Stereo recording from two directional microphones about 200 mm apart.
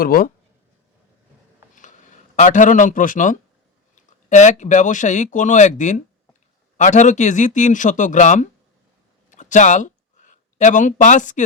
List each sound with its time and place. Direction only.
0.0 s speech: 45° left (ahead or behind)
2.3 s speech: 40° left (ahead or behind)
9.3 s a sound: 40° left (ahead or behind)